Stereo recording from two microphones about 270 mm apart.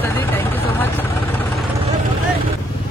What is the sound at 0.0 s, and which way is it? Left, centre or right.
Vehicle, centre.